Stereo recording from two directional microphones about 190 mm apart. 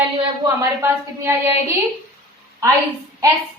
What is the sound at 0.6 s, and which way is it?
Speech, 15° right (ahead or behind).